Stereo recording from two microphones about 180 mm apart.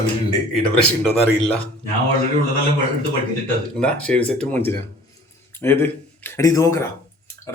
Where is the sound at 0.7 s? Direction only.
5° left (ahead or behind).